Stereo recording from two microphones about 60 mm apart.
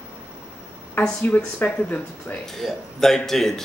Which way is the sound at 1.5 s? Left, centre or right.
Left.